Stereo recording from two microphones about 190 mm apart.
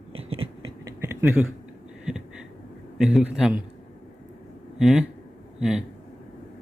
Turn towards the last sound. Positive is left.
turn(degrees=-5)  # may be behind; listen again after turning